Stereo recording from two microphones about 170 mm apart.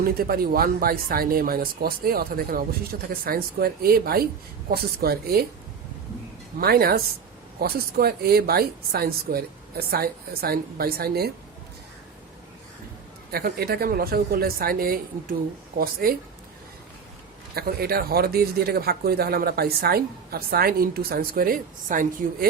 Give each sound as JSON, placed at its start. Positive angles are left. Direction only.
{"t": 0.0, "sound": "speech", "side_deg": -60}
{"t": 6.6, "sound": "speech", "side_deg": -65}
{"t": 13.3, "sound": "speech", "side_deg": -65}
{"t": 17.5, "sound": "speech", "side_deg": -65}